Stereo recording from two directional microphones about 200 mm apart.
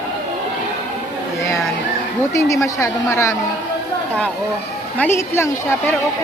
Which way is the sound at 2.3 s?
15° left (ahead or behind).